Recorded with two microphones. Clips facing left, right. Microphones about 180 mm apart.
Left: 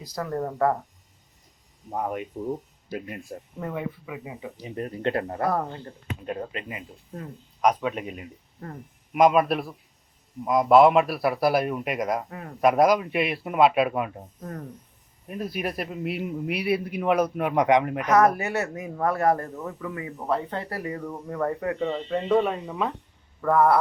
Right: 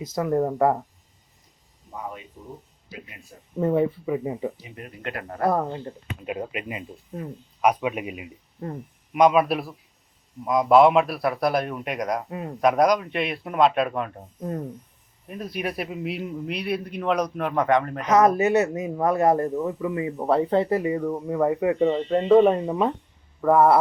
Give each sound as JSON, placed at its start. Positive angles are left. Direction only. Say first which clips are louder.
{"t": 0.0, "sound": "speech", "louder": "right 6 dB", "side_deg": -20}
{"t": 1.9, "sound": "speech", "louder": "left 7 dB", "side_deg": 55}
{"t": 3.6, "sound": "speech", "louder": "right 11 dB", "side_deg": -35}
{"t": 4.6, "sound": "speech", "louder": "left 7 dB", "side_deg": 40}
{"t": 5.5, "sound": "a man's voice", "louder": "right 3 dB", "side_deg": -20}
{"t": 12.3, "sound": "speech", "louder": "right 6 dB", "side_deg": -20}
{"t": 12.5, "sound": "a man's voice", "louder": "even", "side_deg": 5}
{"t": 15.3, "sound": "a man's voice", "louder": "even", "side_deg": 0}
{"t": 18.0, "sound": "speech", "louder": "right 2 dB", "side_deg": -20}
{"t": 20.7, "sound": "speech", "louder": "right 9 dB", "side_deg": -20}
{"t": 22.5, "sound": "speech", "louder": "right 6 dB", "side_deg": -40}
{"t": 23.4, "sound": "speech", "louder": "right 3 dB", "side_deg": -20}